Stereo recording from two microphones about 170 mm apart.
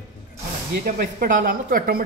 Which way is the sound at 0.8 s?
50° right (ahead or behind).